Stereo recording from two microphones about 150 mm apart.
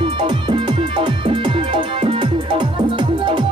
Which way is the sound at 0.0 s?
30° right (ahead or behind).